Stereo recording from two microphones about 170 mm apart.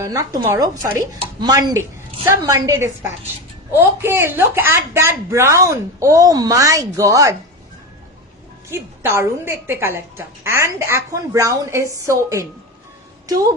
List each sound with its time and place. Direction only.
0.0 s a woman's voice: 20° right (ahead or behind)
8.7 s a woman's voice: 15° right (ahead or behind)